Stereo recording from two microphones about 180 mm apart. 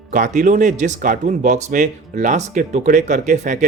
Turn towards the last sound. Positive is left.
turn(degrees=-45)  # may be behind; listen again after turning